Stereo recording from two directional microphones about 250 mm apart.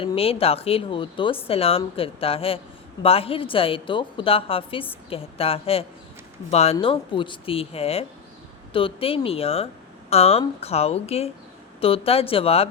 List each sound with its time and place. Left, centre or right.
0.0 s a woman's voice: left